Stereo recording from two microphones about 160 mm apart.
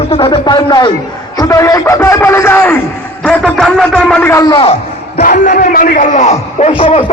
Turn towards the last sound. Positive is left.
turn(degrees=35)  # may be behind; listen again after turning